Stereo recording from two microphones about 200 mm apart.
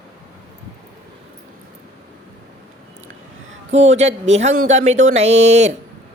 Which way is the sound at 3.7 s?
35° right (ahead or behind).